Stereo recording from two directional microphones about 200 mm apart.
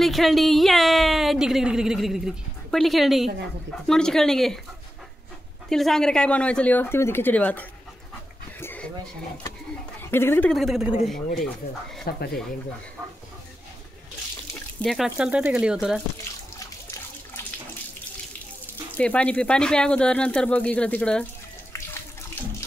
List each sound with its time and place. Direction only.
0.0 s speech: centre (ahead or behind)
5.7 s speech: centre (ahead or behind)
8.5 s dog: 10° left (ahead or behind)
9.9 s speech: 10° left (ahead or behind)
12.1 s speech: 50° left (ahead or behind)
14.5 s speech: 5° left (ahead or behind)
18.9 s speech: 5° left (ahead or behind)